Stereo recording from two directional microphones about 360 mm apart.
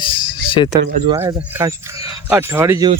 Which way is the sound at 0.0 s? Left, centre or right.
Centre.